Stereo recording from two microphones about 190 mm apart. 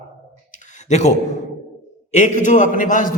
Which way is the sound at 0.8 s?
40° left (ahead or behind).